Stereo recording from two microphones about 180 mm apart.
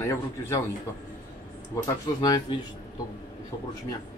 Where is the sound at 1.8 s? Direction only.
20° left (ahead or behind).